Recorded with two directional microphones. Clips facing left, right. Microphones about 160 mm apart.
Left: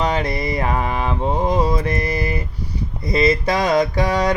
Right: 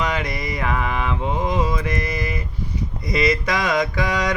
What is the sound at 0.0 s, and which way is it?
Mantra, 30° left (ahead or behind).